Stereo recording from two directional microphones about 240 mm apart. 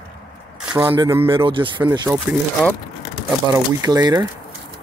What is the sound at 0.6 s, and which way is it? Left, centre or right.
Speech, centre.